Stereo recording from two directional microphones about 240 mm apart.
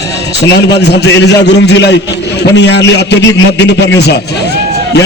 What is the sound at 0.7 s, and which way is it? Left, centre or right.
A man's voice, left.